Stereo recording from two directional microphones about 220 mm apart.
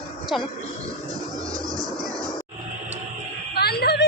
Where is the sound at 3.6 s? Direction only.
45° left (ahead or behind).